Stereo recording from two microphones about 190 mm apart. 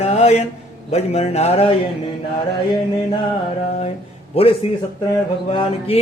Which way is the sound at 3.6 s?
35° left (ahead or behind).